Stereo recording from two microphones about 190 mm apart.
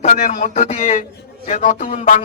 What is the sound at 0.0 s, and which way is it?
A man's voice, 45° left (ahead or behind).